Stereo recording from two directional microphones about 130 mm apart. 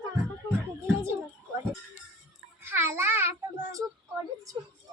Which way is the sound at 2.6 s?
20° right (ahead or behind).